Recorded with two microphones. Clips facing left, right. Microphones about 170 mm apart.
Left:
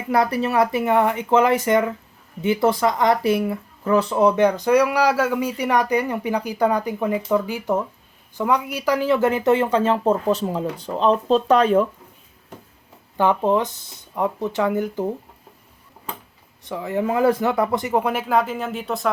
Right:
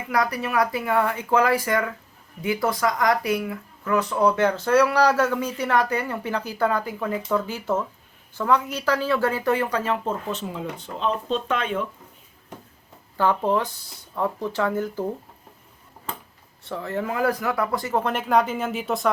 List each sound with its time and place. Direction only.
0.1 s speech: 25° left (ahead or behind)
13.1 s speech: 20° left (ahead or behind)
16.6 s speech: 15° left (ahead or behind); by 19.1 s centre (ahead or behind)